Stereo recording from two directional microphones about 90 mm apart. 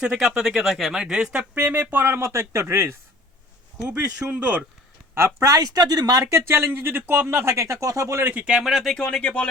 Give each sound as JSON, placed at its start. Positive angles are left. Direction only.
{"t": 0.0, "sound": "speech", "side_deg": -5}
{"t": 1.5, "sound": "speech", "side_deg": -20}
{"t": 3.8, "sound": "speech", "side_deg": -15}
{"t": 5.1, "sound": "speech", "side_deg": -35}
{"t": 6.5, "sound": "speech", "side_deg": -25}
{"t": 8.3, "sound": "speech", "side_deg": -15}